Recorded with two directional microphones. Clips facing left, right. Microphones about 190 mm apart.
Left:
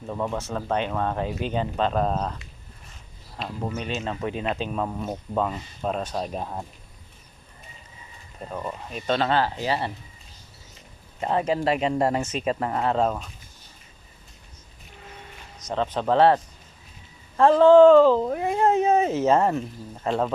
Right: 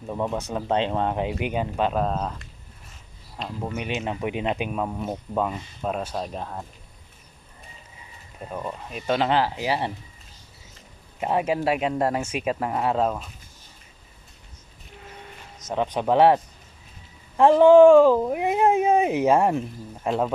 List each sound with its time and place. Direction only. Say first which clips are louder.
0.1 s speech: right 1 dB; 10° right (ahead or behind)
3.3 s speech: even; 5° left (ahead or behind)
3.8 s speech: right 3 dB; 15° right (ahead or behind); by 6.7 s 10° left (ahead or behind)
8.4 s speech: even; 5° right (ahead or behind)
11.2 s speech: even; 10° right (ahead or behind)
15.6 s speech: right 1 dB; 15° right (ahead or behind)